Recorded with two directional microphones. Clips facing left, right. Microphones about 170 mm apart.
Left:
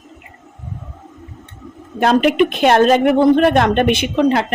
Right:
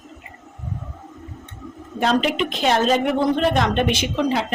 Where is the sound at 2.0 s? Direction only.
60° left (ahead or behind).